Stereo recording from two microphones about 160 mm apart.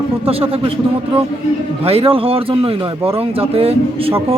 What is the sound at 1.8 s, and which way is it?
Speech, 35° right (ahead or behind).